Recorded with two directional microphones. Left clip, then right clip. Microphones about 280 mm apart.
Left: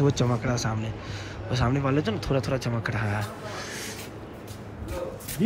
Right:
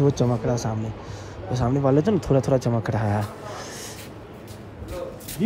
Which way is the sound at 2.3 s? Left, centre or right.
Left.